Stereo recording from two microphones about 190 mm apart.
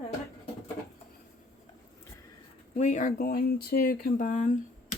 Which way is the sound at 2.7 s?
40° left (ahead or behind).